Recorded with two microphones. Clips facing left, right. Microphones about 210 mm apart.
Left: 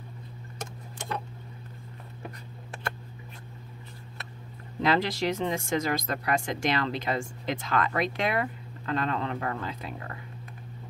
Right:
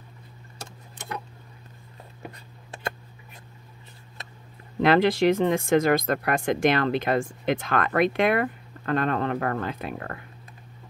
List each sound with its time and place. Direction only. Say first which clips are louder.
4.8 s speech: right 7 dB; 60° right (ahead or behind)